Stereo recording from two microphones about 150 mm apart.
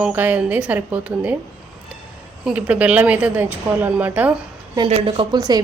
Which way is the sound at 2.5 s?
10° right (ahead or behind).